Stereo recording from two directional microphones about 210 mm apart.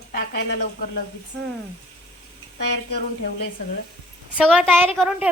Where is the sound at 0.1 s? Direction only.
45° left (ahead or behind).